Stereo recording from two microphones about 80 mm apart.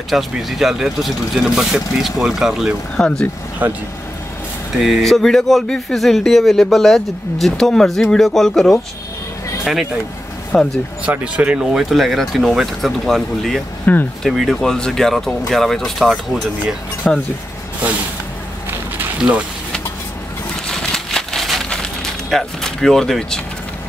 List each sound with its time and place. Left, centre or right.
0.1 s speech: centre
3.0 s speech: centre
3.6 s speech: right
4.7 s speech: centre
10.5 s speech: centre
11.1 s speech: centre
11.7 s speech: centre
13.9 s speech: left
14.2 s speech: centre
20.6 s a sound: centre